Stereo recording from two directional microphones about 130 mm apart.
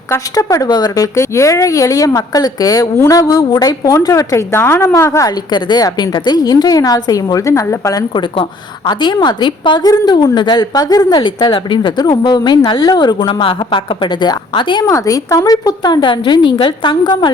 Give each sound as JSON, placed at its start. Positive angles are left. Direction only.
{"t": 0.1, "sound": "a woman's voice", "side_deg": 25}
{"t": 5.5, "sound": "a woman's voice", "side_deg": 35}
{"t": 14.8, "sound": "a woman's voice", "side_deg": 25}